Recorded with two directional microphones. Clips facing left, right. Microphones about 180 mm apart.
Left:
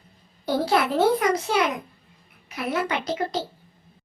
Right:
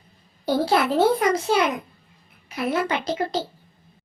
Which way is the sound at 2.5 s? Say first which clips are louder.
Right 2 dB; 30° right (ahead or behind).